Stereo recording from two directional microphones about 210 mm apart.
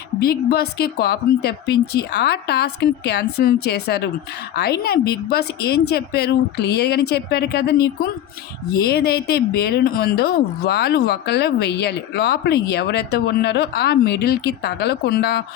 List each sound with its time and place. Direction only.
0.2 s speech: 45° left (ahead or behind)
8.8 s speech: 50° left (ahead or behind)